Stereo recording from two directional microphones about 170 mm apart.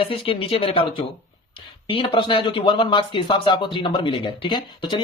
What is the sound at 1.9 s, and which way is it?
Speech, 30° left (ahead or behind).